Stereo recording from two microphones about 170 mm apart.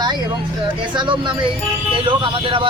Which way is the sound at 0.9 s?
30° right (ahead or behind).